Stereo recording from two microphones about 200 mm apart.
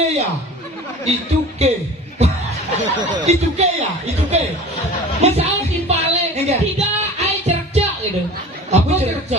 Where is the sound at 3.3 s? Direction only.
35° right (ahead or behind).